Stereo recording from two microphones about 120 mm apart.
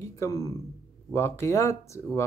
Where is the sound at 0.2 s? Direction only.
25° left (ahead or behind).